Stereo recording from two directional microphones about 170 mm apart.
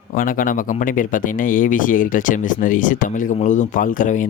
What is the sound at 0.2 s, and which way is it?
Speech, 55° left (ahead or behind).